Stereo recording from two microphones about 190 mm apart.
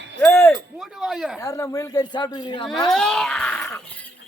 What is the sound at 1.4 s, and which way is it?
Speech, 15° left (ahead or behind).